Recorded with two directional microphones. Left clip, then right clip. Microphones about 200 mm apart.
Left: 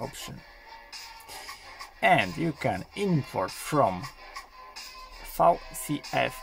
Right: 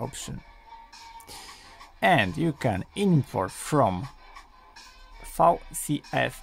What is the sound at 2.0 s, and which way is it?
Speech, 30° right (ahead or behind).